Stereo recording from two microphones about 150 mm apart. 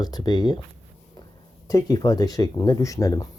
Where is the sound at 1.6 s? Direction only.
25° left (ahead or behind).